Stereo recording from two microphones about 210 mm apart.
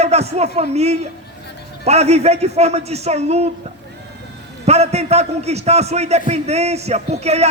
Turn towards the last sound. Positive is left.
turn(degrees=-30)  # may be behind; listen again after turning